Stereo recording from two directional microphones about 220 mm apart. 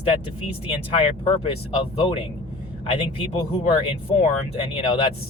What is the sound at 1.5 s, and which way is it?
Speech, 25° left (ahead or behind).